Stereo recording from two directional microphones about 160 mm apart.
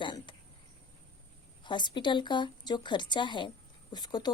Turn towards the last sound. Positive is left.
turn(degrees=25)  # may be behind; listen again after turning